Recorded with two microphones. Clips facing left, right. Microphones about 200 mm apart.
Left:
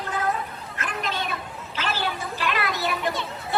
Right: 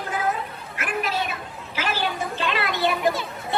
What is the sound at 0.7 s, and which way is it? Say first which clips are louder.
Children playing: right 4 dB; 10° right (ahead or behind).